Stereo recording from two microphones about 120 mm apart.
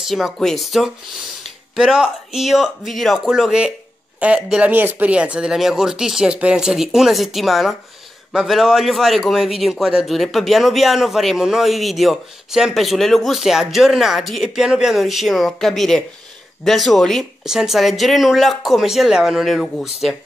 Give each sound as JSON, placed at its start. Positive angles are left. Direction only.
{"t": 0.1, "sound": "a man's voice", "side_deg": 0}